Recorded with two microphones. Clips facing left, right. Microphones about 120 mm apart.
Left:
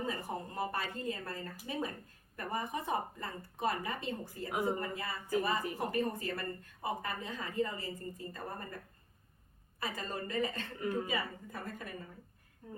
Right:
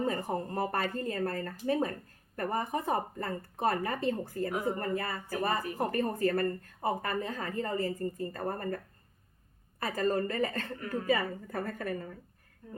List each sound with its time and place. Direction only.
0.0 s speech: 50° right (ahead or behind)
9.8 s speech: 45° right (ahead or behind)